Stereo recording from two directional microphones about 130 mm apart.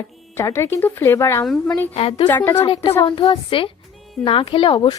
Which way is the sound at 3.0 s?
45° left (ahead or behind).